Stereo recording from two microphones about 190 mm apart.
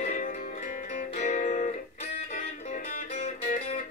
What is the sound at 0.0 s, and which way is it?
Music, 40° left (ahead or behind).